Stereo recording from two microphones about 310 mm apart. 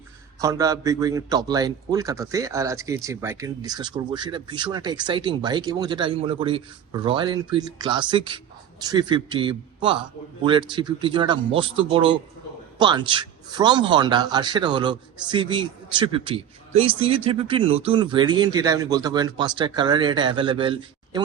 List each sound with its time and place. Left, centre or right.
0.3 s a man's voice: centre